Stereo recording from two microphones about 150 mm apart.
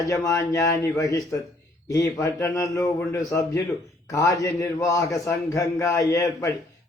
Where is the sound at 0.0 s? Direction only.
20° left (ahead or behind).